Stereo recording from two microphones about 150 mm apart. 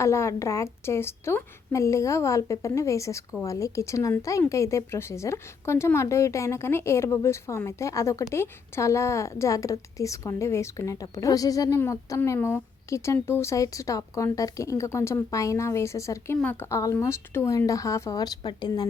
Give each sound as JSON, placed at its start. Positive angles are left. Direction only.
{"t": 0.0, "sound": "a woman's voice", "side_deg": 20}